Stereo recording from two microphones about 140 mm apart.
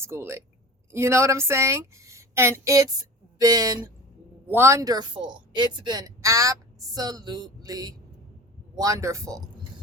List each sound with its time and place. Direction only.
0.0 s speech: 20° right (ahead or behind)